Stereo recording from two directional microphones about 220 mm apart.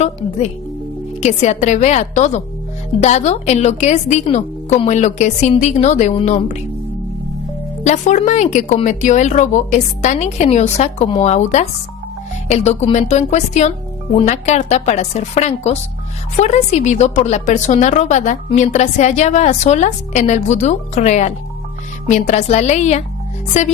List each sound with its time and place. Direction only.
1.2 s a woman's voice: 30° left (ahead or behind)
7.9 s a woman's voice: 35° left (ahead or behind)